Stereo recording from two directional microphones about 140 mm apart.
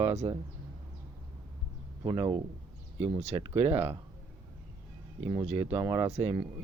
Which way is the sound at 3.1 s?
45° right (ahead or behind).